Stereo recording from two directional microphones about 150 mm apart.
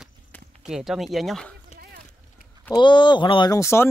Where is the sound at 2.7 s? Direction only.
30° left (ahead or behind).